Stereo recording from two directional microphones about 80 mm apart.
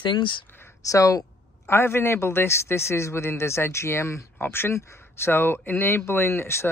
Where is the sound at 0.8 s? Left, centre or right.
Left.